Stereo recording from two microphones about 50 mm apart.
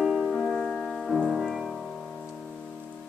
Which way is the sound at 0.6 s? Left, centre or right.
Centre.